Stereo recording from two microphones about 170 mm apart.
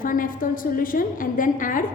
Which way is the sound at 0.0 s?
55° left (ahead or behind).